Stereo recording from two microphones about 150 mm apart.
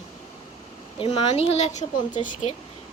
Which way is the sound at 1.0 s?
40° left (ahead or behind).